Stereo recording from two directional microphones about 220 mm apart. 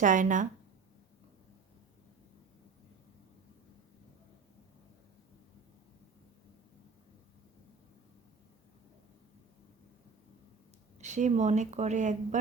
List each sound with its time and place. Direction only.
0.0 s speech: 35° right (ahead or behind)
11.0 s speech: 30° right (ahead or behind)